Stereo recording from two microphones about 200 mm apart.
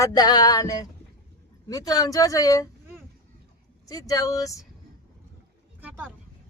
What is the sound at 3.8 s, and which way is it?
Speech, 20° left (ahead or behind).